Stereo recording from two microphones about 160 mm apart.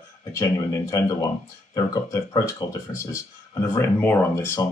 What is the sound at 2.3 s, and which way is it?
Speech, 20° left (ahead or behind).